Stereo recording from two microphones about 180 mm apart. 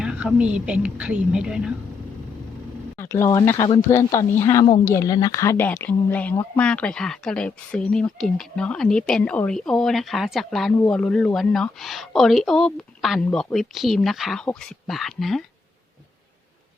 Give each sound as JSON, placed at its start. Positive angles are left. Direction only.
{"t": 0.0, "sound": "a woman's voice", "side_deg": -5}
{"t": 3.0, "sound": "a woman's voice", "side_deg": 15}